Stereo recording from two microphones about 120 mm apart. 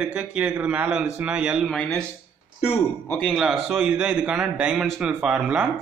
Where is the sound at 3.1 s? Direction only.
Centre (ahead or behind).